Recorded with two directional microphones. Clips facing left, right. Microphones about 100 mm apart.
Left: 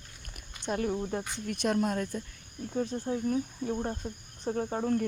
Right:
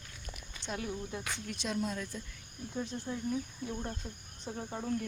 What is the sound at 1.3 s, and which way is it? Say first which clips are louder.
Speech: left 8 dB; 55° left (ahead or behind).